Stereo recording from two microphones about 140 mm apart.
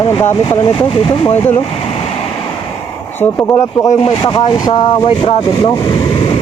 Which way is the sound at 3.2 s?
15° left (ahead or behind).